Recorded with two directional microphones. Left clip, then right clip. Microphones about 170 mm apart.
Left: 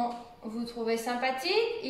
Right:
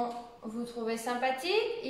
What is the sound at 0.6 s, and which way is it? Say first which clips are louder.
Speech: left 3 dB; 20° right (ahead or behind).